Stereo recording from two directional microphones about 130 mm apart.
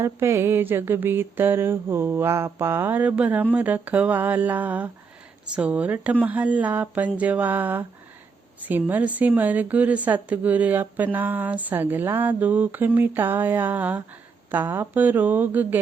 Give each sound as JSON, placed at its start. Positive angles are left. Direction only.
{"t": 0.0, "sound": "a woman's voice", "side_deg": -20}